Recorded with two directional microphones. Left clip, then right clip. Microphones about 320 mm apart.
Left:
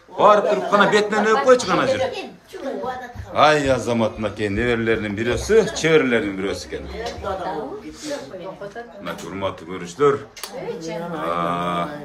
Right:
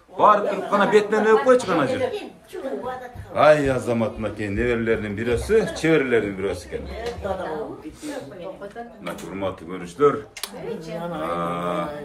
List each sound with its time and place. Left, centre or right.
0.2 s a man's voice: centre
3.3 s a man's voice: centre
9.3 s a man's voice: centre
11.2 s a man's voice: centre